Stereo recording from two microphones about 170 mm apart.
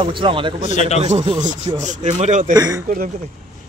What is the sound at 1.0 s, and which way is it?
Speech, 40° right (ahead or behind).